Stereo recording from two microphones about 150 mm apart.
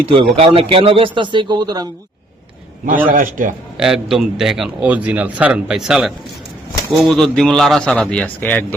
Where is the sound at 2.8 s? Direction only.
65° right (ahead or behind).